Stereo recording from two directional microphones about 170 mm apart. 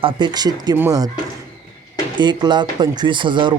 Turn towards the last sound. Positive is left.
turn(degrees=-30)  # may be behind; listen again after turning